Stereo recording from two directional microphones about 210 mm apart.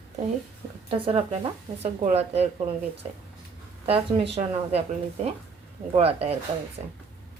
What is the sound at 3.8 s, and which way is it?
Speech, 25° right (ahead or behind).